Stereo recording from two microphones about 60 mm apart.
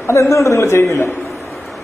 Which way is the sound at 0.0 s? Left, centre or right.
Left.